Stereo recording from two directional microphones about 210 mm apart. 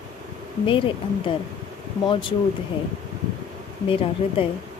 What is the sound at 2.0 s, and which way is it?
Speech, 25° left (ahead or behind).